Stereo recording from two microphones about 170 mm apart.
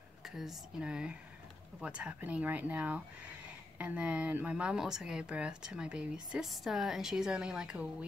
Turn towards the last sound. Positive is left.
turn(degrees=-5)  # may be behind; listen again after turning